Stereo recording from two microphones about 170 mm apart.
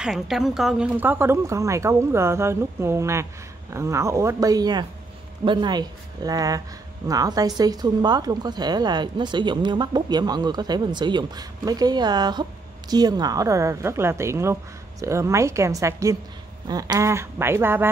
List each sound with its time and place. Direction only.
0.0 s a woman's voice: centre (ahead or behind)